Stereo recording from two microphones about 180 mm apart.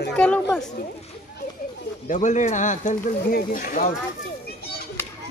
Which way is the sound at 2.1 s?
45° left (ahead or behind).